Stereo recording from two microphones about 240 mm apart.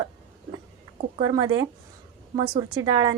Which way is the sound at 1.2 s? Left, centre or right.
Centre.